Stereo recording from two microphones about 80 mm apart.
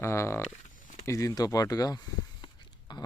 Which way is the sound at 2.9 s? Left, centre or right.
Left.